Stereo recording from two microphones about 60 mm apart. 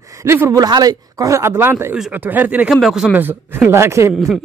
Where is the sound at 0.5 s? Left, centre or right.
Right.